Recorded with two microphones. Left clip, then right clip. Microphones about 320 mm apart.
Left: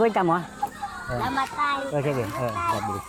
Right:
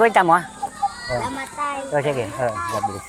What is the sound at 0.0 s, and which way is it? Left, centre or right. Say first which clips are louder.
Speech: right 7 dB; right.